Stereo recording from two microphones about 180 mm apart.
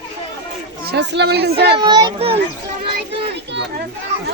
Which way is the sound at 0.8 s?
70° right (ahead or behind).